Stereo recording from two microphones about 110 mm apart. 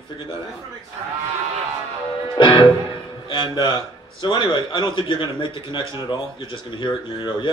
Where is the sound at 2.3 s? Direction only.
50° left (ahead or behind).